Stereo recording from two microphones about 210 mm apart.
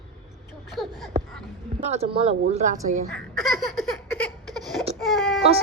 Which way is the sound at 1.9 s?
30° right (ahead or behind).